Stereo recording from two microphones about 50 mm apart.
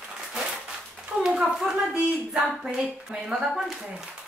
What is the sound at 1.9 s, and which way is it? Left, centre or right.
Speech, right.